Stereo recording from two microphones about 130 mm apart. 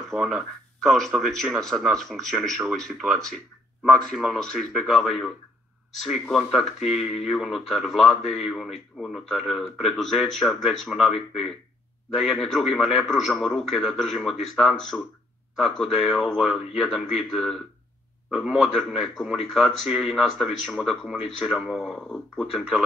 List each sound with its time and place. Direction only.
0.1 s speech: centre (ahead or behind)